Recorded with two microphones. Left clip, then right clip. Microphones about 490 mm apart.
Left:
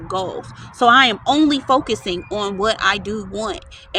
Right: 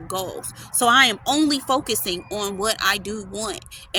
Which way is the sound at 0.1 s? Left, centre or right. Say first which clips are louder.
Left 5 dB; right.